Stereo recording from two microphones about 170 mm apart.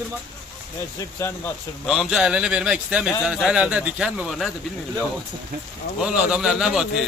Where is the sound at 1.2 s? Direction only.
15° left (ahead or behind).